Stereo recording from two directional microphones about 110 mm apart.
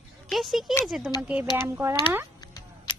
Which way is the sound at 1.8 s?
30° right (ahead or behind).